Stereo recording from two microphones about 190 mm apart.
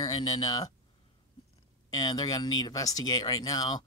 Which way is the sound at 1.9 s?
20° left (ahead or behind).